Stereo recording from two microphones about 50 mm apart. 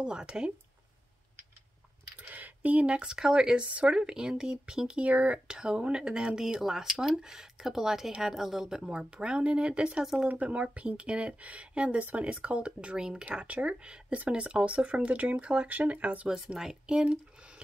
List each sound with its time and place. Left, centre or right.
0.0 s speech: centre
2.2 s speech: right; by 5.0 s centre
5.0 s speech: right
5.5 s speech: centre
13.2 s speech: right
16.5 s speech: centre